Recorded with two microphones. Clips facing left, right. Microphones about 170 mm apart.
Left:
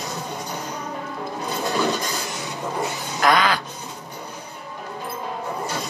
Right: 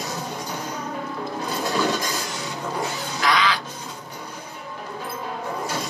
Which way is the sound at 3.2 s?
50° left (ahead or behind).